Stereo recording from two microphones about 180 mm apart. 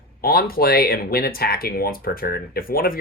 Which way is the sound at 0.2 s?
55° left (ahead or behind).